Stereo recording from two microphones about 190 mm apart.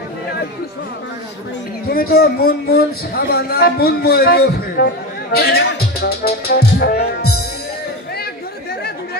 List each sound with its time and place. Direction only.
1.9 s speech: 50° left (ahead or behind)